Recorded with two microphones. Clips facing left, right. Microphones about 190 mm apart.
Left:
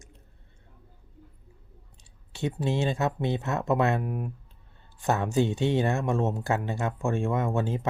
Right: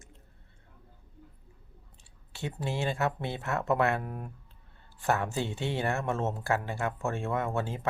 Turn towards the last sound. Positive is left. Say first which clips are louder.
# left 4 dB
turn(degrees=20)  # may be behind; listen again after turning